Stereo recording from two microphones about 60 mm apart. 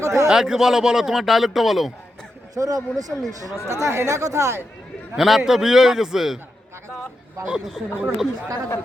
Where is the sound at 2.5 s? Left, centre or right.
Right.